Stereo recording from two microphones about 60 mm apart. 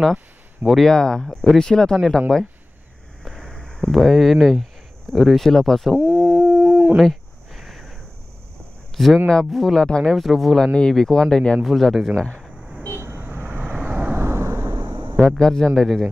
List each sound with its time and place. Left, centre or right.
0.7 s speech: centre
3.3 s a sound: centre
5.1 s speech: centre
5.9 s a sound: right
7.0 s a sound: centre
8.9 s speech: centre
9.8 s speech: centre
10.1 s speech: centre
10.7 s speech: centre
11.6 s speech: centre
12.9 s vehicle: right
13.6 s vehicle: right
14.1 s arrow: right
15.2 s speech: centre